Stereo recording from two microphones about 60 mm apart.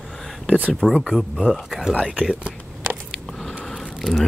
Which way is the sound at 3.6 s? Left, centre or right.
Centre.